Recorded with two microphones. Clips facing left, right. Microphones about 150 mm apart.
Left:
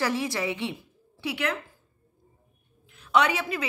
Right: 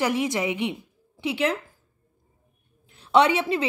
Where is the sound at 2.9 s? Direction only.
30° right (ahead or behind).